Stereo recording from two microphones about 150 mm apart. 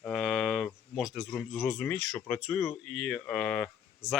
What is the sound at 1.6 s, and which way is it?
Speech, 5° left (ahead or behind).